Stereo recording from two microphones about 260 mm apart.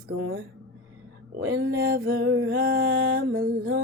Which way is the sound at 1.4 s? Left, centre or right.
Right.